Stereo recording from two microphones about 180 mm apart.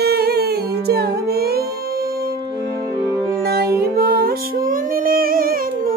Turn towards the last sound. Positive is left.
turn(degrees=-55)  # may be behind; listen again after turning